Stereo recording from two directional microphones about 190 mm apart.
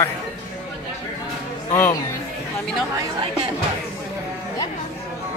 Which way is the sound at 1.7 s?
15° left (ahead or behind).